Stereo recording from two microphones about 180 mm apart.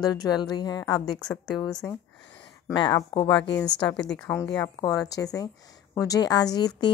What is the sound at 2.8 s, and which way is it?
Speech, 25° left (ahead or behind).